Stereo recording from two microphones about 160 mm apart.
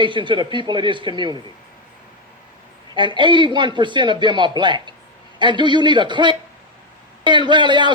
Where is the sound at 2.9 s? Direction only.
30° right (ahead or behind).